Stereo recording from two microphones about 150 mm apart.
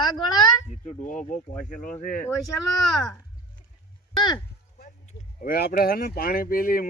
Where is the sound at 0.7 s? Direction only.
50° left (ahead or behind).